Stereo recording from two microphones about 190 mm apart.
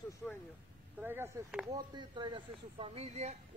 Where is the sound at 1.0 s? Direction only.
10° right (ahead or behind).